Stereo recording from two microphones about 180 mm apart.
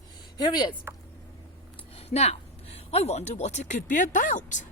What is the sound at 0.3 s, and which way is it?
Speech, 25° left (ahead or behind).